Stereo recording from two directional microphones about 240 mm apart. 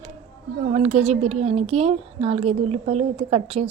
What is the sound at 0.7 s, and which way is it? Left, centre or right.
Speech, right.